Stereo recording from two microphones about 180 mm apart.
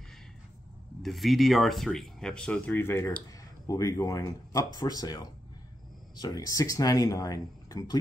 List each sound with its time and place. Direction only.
1.0 s speech: centre (ahead or behind); by 8.0 s 20° left (ahead or behind)